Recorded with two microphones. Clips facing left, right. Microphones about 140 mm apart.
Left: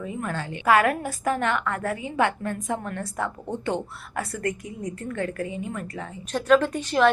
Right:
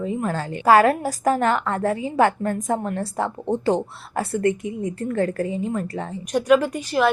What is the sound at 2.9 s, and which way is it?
A woman's voice, 30° right (ahead or behind).